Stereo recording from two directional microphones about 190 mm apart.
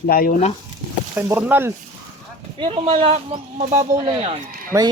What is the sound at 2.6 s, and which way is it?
Speech, 25° right (ahead or behind).